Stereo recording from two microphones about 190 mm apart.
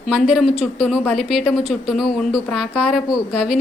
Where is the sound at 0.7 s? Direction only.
5° right (ahead or behind).